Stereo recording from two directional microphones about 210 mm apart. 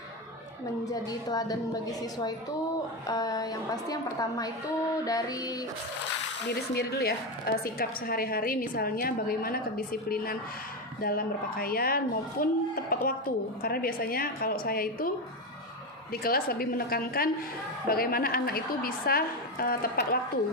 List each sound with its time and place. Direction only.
0.9 s a woman's voice: 20° left (ahead or behind)
6.5 s a woman's voice: 50° left (ahead or behind)
16.2 s a woman's voice: 45° left (ahead or behind)